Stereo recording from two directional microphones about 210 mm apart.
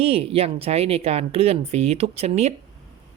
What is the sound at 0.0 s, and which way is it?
Speech, 30° right (ahead or behind).